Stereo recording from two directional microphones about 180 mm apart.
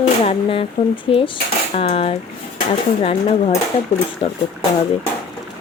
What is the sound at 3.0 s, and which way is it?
Speech, 30° left (ahead or behind).